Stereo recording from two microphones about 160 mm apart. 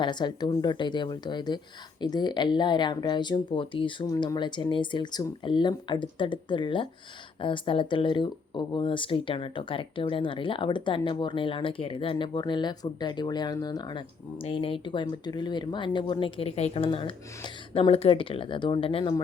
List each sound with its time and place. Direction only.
0.0 s speech: 30° left (ahead or behind)